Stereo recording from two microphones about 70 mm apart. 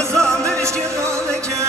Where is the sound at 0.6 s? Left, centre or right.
Right.